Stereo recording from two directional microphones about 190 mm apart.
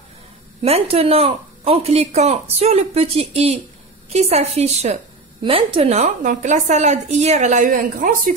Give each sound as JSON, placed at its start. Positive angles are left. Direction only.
{"t": 0.6, "sound": "a woman's voice", "side_deg": -30}